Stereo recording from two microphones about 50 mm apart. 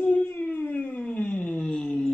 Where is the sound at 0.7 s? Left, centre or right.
Left.